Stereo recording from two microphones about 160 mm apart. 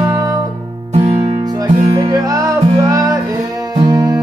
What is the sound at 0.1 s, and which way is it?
Music, 20° right (ahead or behind).